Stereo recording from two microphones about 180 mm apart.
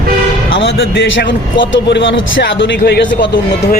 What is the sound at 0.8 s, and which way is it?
Speech, 90° left.